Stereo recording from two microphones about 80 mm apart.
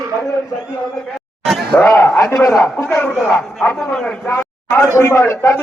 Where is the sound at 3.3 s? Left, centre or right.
Centre.